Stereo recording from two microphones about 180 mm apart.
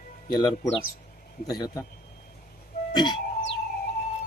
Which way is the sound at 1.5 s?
20° left (ahead or behind).